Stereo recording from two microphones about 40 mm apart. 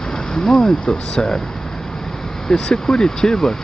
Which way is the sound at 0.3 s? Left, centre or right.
Centre.